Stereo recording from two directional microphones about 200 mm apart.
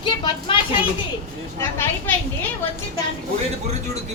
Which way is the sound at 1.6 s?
15° left (ahead or behind).